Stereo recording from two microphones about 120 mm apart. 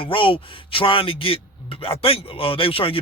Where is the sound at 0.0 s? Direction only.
45° left (ahead or behind).